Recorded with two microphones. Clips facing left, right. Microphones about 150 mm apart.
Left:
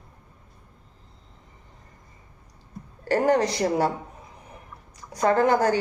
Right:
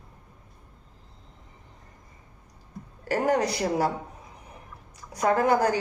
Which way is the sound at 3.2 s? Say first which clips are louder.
Left 2 dB; 30° left (ahead or behind).